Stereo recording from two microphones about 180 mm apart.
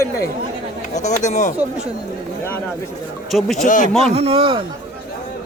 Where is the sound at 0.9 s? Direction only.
40° left (ahead or behind).